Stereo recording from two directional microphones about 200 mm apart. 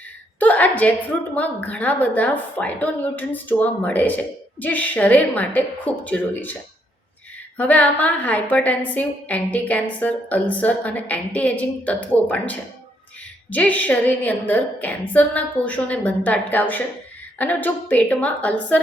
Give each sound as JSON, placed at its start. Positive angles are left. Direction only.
{"t": 0.3, "sound": "a woman's voice", "side_deg": 10}